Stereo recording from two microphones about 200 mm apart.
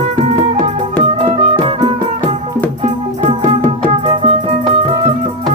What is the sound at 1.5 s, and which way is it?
Music, 25° right (ahead or behind).